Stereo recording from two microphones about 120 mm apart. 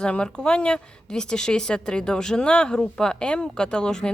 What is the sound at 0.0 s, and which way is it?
Speech, 5° left (ahead or behind).